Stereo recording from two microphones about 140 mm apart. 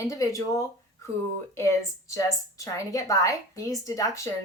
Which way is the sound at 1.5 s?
20° left (ahead or behind).